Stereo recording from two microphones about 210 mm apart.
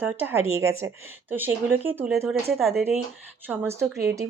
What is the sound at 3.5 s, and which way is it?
Speech, 10° right (ahead or behind).